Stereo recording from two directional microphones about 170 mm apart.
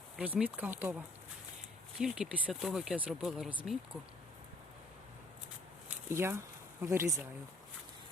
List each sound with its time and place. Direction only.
0.2 s speech: 5° right (ahead or behind)
6.1 s speech: 15° right (ahead or behind)